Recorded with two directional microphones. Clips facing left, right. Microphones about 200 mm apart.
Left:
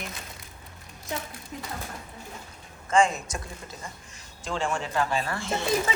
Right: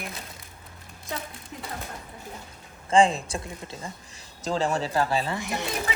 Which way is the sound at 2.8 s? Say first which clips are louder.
Right 3 dB; 30° right (ahead or behind).